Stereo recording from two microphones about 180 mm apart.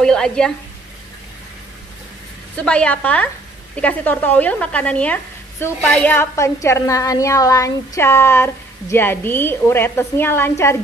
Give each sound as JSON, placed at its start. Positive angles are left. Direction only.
{"t": 0.0, "sound": "speech", "side_deg": 5}
{"t": 2.5, "sound": "a woman's voice", "side_deg": 5}